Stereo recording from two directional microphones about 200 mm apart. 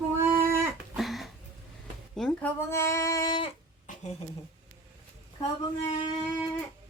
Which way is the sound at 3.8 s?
35° left (ahead or behind).